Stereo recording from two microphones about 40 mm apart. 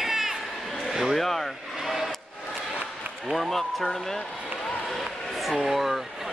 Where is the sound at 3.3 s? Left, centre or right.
Centre.